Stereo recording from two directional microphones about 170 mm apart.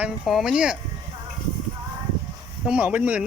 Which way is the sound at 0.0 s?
Centre (ahead or behind).